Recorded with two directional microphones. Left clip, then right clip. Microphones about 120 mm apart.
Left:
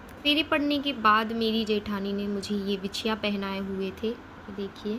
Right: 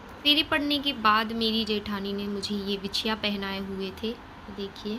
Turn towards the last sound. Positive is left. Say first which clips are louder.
# left 1 dB
turn(degrees=15)  # may be behind; listen again after turning